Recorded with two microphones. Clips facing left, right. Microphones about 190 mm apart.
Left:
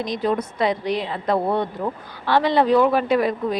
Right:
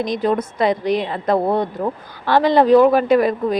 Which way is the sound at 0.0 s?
50° right (ahead or behind).